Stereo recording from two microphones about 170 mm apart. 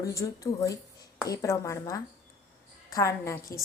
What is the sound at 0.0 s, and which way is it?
A woman's voice, 20° left (ahead or behind).